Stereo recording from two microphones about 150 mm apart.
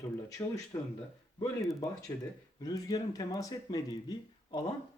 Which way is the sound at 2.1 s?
25° left (ahead or behind).